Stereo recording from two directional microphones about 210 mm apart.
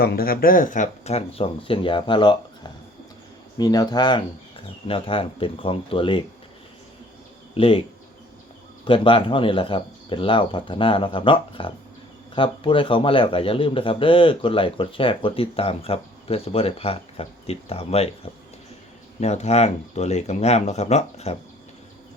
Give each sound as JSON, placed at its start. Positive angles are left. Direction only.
{"t": 0.0, "sound": "a man's voice", "side_deg": 45}
{"t": 7.5, "sound": "speech", "side_deg": 25}
{"t": 8.8, "sound": "a man's voice", "side_deg": 25}
{"t": 19.2, "sound": "speech", "side_deg": 30}